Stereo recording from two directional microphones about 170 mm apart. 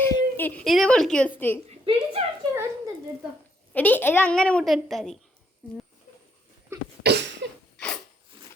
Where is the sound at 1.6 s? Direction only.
35° right (ahead or behind).